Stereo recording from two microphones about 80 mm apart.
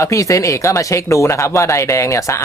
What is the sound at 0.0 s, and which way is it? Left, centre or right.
Speech, left.